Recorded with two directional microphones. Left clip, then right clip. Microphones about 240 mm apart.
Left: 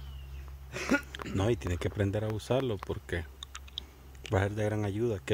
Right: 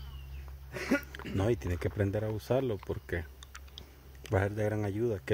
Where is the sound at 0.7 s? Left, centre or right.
Centre.